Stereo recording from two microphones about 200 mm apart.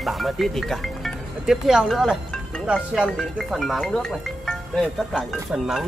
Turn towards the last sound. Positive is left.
turn(degrees=0)  # may be behind; listen again after turning